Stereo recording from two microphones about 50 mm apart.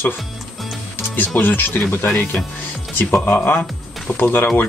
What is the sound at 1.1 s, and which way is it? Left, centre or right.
Speech, left.